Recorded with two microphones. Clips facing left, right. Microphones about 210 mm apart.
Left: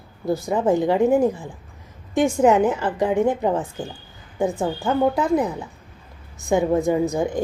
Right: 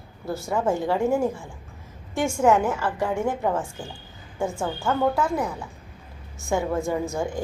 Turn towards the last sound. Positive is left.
turn(degrees=15)  # may be behind; listen again after turning